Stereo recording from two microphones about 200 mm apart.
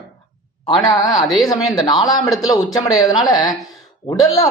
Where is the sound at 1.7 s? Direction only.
20° left (ahead or behind).